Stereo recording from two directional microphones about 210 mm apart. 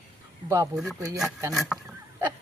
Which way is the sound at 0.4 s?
15° right (ahead or behind).